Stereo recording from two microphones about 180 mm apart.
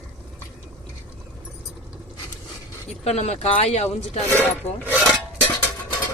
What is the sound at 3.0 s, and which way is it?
A woman's voice, 35° left (ahead or behind).